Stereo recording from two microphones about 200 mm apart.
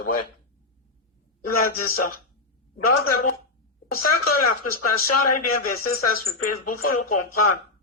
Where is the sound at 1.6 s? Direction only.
50° left (ahead or behind).